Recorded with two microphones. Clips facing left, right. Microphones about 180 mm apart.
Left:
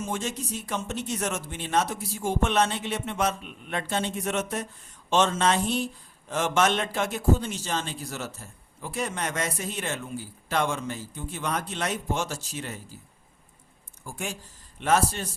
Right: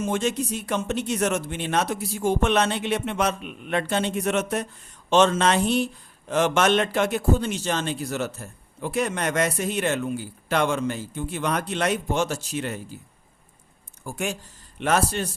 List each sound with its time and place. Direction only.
0.0 s a man's voice: 70° right (ahead or behind)
14.0 s a man's voice: 65° right (ahead or behind)